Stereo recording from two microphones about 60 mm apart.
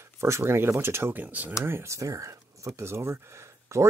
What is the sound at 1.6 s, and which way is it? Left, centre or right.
Speech, right.